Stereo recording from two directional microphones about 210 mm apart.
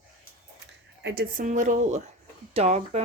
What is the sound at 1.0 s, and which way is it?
Speech, 55° right (ahead or behind).